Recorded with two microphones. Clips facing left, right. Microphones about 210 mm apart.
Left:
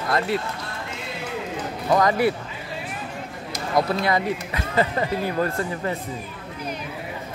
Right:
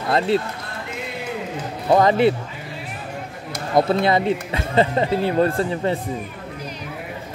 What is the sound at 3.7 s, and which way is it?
Speech, 25° right (ahead or behind).